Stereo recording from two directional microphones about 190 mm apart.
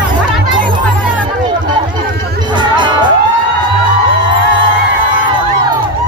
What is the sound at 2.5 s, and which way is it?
Music, 25° right (ahead or behind).